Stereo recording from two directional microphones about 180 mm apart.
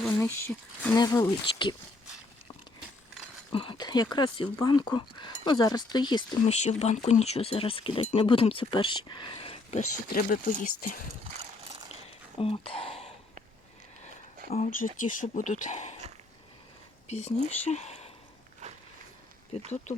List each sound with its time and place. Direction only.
0.2 s speech: 15° left (ahead or behind)
0.9 s speech: 20° left (ahead or behind)
3.5 s speech: 30° left (ahead or behind)
6.5 s speech: 40° left (ahead or behind)
10.1 s speech: 50° left (ahead or behind)
12.4 s speech: 30° left (ahead or behind)
14.5 s speech: 45° left (ahead or behind)
17.1 s speech: 40° left (ahead or behind)
18.6 s a sound: 40° right (ahead or behind)